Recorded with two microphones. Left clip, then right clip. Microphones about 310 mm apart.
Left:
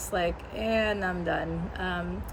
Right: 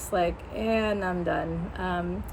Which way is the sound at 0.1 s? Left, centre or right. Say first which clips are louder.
Right 3 dB; centre.